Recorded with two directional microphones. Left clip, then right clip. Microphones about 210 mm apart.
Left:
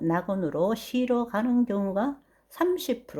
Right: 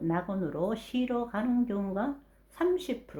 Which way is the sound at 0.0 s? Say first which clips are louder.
Left 5 dB; 40° left (ahead or behind).